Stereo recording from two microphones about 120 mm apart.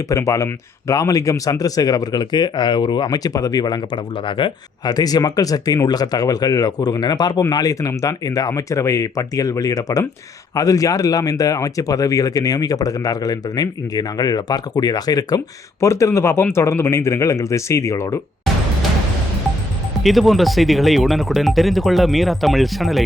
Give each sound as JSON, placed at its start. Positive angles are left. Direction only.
{"t": 0.1, "sound": "speech", "side_deg": 25}
{"t": 20.0, "sound": "speech", "side_deg": 0}